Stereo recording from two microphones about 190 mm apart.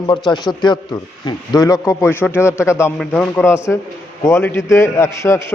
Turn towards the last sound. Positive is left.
turn(degrees=15)  # may be behind; listen again after turning